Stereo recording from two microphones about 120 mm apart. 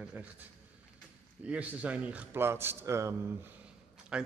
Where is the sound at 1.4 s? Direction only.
10° right (ahead or behind).